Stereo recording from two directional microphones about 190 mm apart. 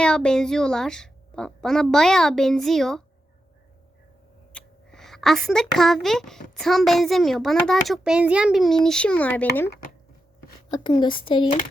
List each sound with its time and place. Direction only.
0.0 s a woman's voice: 5° left (ahead or behind)
4.5 s a woman's voice: 5° left (ahead or behind)
10.7 s speech: 25° left (ahead or behind)